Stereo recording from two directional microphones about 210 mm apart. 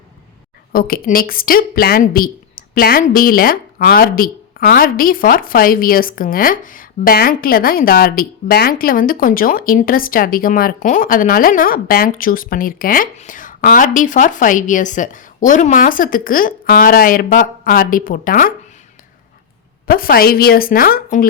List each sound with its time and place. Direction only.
0.7 s a woman's voice: 45° left (ahead or behind)
19.9 s a woman's voice: 45° left (ahead or behind)